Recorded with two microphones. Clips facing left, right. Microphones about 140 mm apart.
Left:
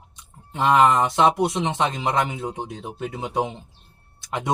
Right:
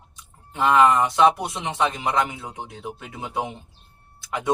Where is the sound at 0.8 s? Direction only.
25° left (ahead or behind).